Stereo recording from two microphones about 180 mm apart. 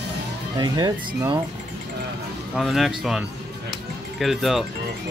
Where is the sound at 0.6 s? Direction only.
25° right (ahead or behind).